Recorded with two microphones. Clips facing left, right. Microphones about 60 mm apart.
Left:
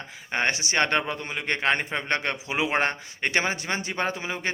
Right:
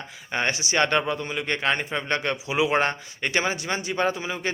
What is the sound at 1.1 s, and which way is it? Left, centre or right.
Speech, left.